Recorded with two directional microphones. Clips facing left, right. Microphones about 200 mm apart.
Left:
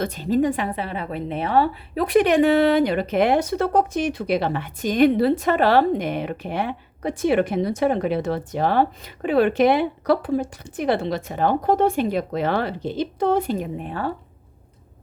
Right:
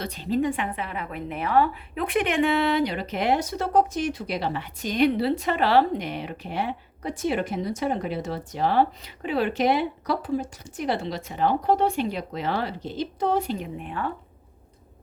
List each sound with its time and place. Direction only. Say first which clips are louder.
0.0 s a woman's voice: left 5 dB; 45° left (ahead or behind)